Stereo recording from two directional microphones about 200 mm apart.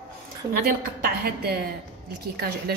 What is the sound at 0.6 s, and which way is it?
A woman's voice, 50° right (ahead or behind).